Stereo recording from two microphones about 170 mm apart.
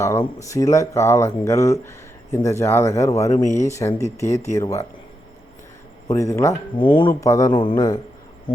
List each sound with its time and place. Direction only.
0.0 s speech: 15° left (ahead or behind)
6.1 s speech: 15° left (ahead or behind)
6.7 s speech: 30° left (ahead or behind)
7.1 s speech: 20° left (ahead or behind)
7.5 s speech: 30° left (ahead or behind)